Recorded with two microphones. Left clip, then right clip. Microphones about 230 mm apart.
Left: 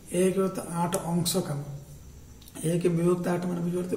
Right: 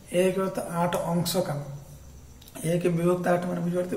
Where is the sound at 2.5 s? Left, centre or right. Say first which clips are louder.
Right 1 dB; centre.